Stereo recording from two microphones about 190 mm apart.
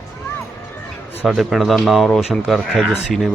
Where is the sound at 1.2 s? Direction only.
Centre (ahead or behind).